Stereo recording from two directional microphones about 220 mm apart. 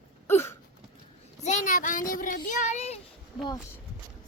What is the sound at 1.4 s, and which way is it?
A child's voice, 30° left (ahead or behind).